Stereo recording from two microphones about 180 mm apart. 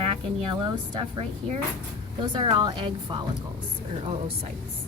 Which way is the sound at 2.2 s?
25° right (ahead or behind).